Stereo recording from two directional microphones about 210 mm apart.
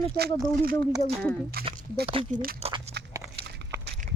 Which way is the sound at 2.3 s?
40° right (ahead or behind).